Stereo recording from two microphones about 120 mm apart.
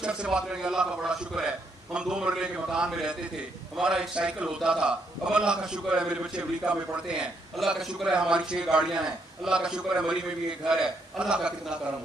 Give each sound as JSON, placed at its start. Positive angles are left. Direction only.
{"t": 0.0, "sound": "a man's voice", "side_deg": -5}